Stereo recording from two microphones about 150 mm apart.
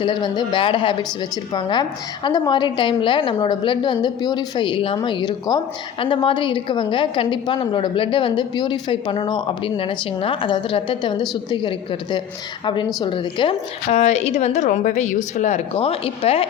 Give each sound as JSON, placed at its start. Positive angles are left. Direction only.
{"t": 0.0, "sound": "a woman's voice", "side_deg": 30}